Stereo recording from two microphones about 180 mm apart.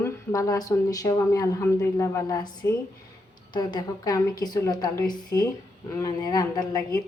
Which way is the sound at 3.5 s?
25° left (ahead or behind).